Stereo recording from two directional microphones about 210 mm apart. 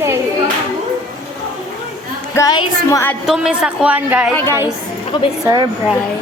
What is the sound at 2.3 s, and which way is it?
Speech, 20° left (ahead or behind).